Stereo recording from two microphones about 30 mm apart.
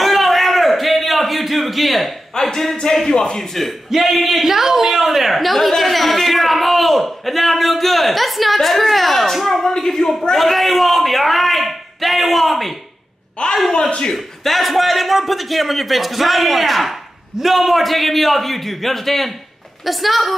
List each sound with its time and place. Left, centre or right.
0.0 s a sound: centre
2.5 s speech: centre
3.1 s speech: left
3.3 s speech: centre
3.9 s a man's voice: centre
13.4 s a man's voice: left
14.1 s a man's voice: centre